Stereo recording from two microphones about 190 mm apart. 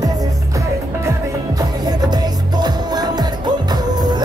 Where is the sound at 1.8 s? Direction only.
20° right (ahead or behind).